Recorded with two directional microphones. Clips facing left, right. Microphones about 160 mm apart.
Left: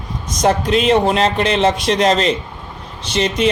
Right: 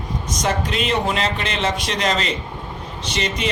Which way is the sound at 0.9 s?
40° left (ahead or behind).